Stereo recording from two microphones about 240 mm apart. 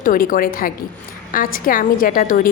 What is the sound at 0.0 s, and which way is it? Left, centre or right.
A woman's voice, left.